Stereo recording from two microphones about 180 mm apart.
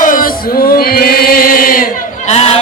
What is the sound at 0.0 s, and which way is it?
Chant, 50° left (ahead or behind).